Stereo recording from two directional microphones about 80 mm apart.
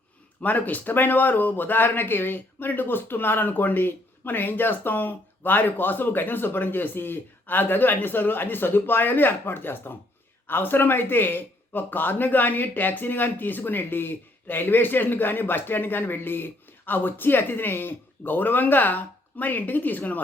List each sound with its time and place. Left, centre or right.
0.4 s speech: left